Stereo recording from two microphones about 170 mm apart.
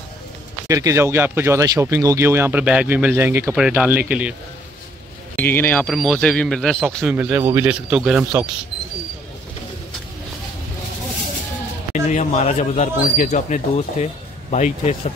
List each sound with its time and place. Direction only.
0.7 s speech: 20° right (ahead or behind)
3.4 s speech: 5° right (ahead or behind)
5.3 s speech: 10° left (ahead or behind)
7.2 s speech: 10° right (ahead or behind)
11.9 s speech: 45° left (ahead or behind)